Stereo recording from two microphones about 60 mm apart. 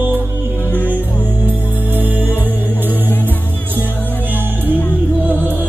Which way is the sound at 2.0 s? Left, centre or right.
Right.